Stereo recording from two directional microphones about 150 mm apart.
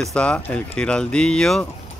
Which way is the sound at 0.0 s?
5° left (ahead or behind).